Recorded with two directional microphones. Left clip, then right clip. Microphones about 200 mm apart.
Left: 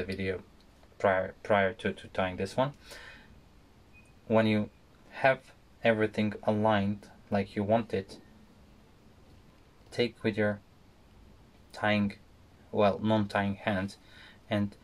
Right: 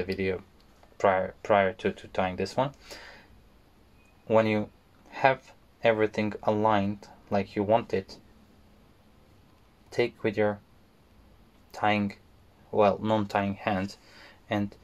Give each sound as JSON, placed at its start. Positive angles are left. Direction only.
{"t": 0.0, "sound": "speech", "side_deg": -40}
{"t": 4.3, "sound": "speech", "side_deg": -40}
{"t": 9.9, "sound": "speech", "side_deg": -40}
{"t": 11.7, "sound": "speech", "side_deg": -40}